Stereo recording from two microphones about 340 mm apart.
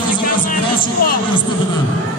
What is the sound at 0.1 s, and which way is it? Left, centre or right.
Music, left.